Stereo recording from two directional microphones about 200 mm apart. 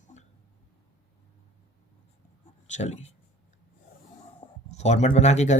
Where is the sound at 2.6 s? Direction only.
35° left (ahead or behind).